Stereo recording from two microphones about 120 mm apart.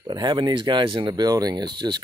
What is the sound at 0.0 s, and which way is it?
Speech, 40° right (ahead or behind).